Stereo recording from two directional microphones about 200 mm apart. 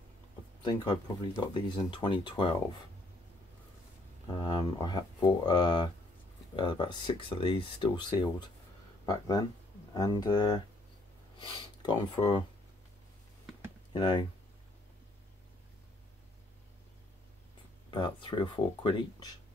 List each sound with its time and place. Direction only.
0.6 s speech: 20° left (ahead or behind)
4.3 s speech: 20° left (ahead or behind)
13.9 s speech: 20° left (ahead or behind)
17.9 s speech: 25° left (ahead or behind)